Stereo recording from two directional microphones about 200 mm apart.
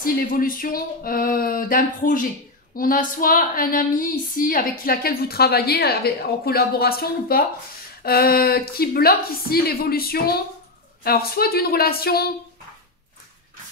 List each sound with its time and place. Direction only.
0.0 s speech: 45° left (ahead or behind)